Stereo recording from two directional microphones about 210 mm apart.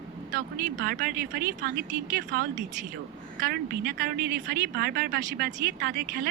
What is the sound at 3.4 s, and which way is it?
A woman's voice, 45° right (ahead or behind).